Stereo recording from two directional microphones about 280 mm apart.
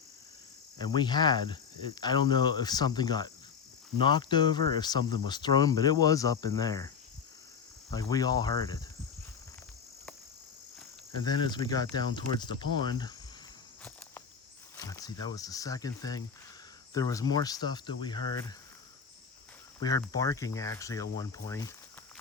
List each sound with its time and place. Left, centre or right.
0.9 s speech: centre
7.9 s speech: centre
11.2 s speech: centre
14.8 s speech: centre
19.8 s speech: centre